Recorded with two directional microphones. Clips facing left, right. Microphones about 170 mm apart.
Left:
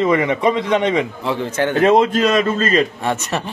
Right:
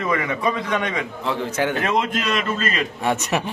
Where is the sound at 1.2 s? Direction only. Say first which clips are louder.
Left 3 dB; centre (ahead or behind).